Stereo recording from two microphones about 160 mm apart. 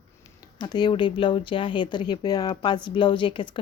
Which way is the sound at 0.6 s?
25° left (ahead or behind).